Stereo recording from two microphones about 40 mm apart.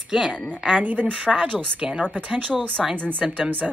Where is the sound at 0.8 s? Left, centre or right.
Right.